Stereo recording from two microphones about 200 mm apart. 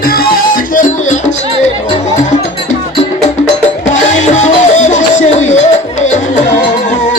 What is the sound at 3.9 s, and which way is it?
Music, 35° left (ahead or behind).